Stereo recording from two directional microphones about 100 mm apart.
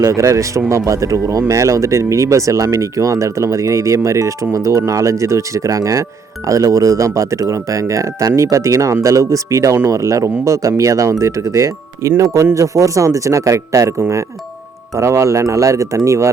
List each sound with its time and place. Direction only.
0.0 s speech: 30° right (ahead or behind)
14.9 s speech: 30° right (ahead or behind)